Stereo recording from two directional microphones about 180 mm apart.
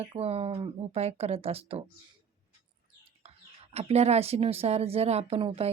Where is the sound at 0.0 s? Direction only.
35° right (ahead or behind).